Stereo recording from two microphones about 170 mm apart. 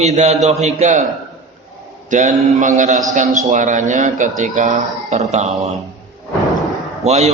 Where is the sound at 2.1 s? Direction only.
50° right (ahead or behind).